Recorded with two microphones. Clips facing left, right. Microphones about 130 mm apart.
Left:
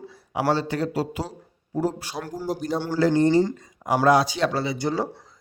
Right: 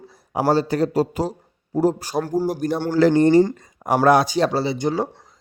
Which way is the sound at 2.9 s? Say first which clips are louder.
Right 5 dB; 75° right (ahead or behind).